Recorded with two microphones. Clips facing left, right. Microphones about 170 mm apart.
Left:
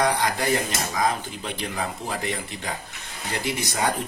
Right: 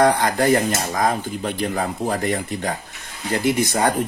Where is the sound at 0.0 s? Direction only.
50° right (ahead or behind).